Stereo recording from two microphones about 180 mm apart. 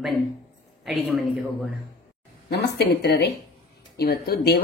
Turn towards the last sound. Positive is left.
turn(degrees=60)  # may be behind; listen again after turning